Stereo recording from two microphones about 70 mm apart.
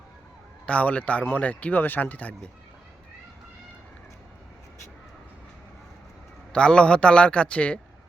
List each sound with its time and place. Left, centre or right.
0.6 s speech: centre
6.5 s a man's voice: centre